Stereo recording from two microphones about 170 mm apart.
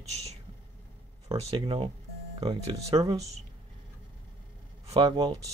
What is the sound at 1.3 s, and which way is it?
Speech, 30° right (ahead or behind).